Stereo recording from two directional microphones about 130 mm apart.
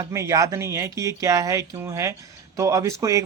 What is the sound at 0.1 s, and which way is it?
Speech, 25° right (ahead or behind).